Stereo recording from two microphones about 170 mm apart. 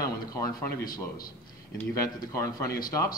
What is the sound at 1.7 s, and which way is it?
Speech, 15° left (ahead or behind).